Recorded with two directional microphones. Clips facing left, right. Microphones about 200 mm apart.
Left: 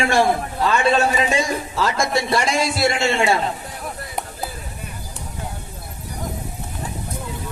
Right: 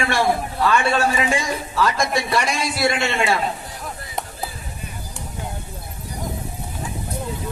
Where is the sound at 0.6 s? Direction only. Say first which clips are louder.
Left 1 dB; 25° left (ahead or behind).